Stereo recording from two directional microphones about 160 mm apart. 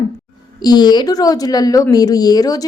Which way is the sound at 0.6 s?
25° left (ahead or behind).